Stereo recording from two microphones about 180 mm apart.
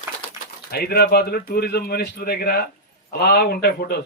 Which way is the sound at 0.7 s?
60° left (ahead or behind).